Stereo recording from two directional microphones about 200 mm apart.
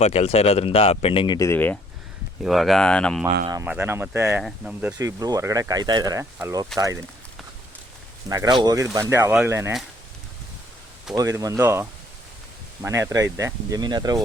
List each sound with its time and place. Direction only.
0.0 s speech: 30° left (ahead or behind); by 3.2 s 5° left (ahead or behind)
3.5 s speech: 10° right (ahead or behind)
4.9 s speech: 15° right (ahead or behind)
8.3 s speech: 20° right (ahead or behind)
11.2 s speech: 15° right (ahead or behind)